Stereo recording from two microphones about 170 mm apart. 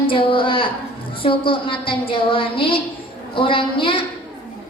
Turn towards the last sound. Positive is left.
turn(degrees=30)  # may be behind; listen again after turning